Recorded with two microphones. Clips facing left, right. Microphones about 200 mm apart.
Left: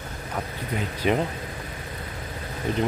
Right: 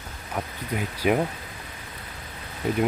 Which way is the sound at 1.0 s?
10° right (ahead or behind).